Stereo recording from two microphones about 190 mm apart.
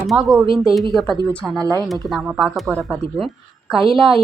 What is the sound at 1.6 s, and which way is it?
Speech, 15° right (ahead or behind).